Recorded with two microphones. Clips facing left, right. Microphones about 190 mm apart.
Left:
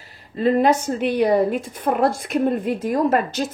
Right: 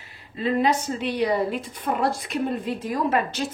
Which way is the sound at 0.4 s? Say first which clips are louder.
Left 5 dB; 50° left (ahead or behind).